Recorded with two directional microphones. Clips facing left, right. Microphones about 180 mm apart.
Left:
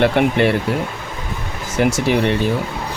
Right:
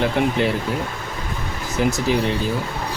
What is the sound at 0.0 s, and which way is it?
Speech, 65° left (ahead or behind).